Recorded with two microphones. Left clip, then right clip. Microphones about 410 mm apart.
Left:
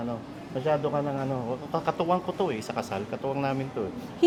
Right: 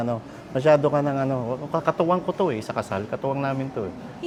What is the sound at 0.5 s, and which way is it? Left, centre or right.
A man's voice, right.